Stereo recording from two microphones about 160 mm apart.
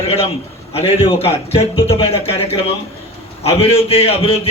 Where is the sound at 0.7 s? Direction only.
35° left (ahead or behind).